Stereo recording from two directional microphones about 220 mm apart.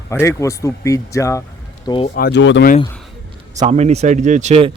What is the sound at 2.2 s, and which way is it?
Speech, 50° left (ahead or behind).